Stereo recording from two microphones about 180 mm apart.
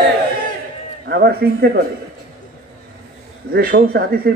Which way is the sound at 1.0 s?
65° right (ahead or behind).